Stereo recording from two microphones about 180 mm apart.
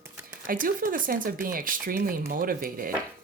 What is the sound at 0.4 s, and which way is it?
Speech, 50° right (ahead or behind).